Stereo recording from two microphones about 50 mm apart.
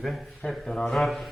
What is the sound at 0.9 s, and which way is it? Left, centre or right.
Speech, centre.